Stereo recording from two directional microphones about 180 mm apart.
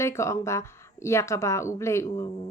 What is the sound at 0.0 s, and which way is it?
Speech, 15° left (ahead or behind).